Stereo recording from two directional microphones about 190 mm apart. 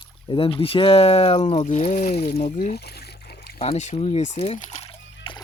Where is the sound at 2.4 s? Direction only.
50° left (ahead or behind).